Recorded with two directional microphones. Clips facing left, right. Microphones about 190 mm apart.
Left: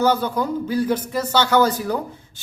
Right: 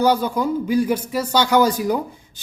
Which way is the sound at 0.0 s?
15° right (ahead or behind).